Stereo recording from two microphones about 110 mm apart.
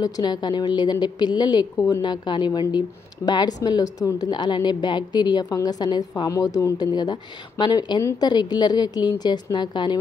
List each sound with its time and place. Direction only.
0.0 s a woman's voice: 40° left (ahead or behind)